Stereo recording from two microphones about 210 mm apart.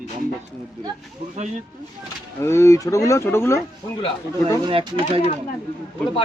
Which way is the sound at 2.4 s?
10° left (ahead or behind).